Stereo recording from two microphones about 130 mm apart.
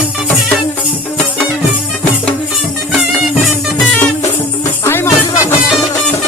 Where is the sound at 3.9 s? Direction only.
10° left (ahead or behind).